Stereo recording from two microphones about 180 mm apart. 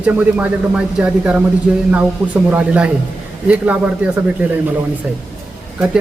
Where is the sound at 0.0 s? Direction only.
10° right (ahead or behind).